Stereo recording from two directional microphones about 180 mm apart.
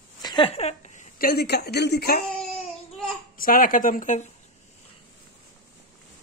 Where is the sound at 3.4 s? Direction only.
50° left (ahead or behind).